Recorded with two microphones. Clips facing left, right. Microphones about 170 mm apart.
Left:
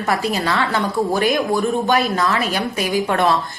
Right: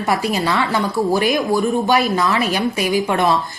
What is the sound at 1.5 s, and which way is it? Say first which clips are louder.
A woman's voice: right 1 dB; 10° right (ahead or behind).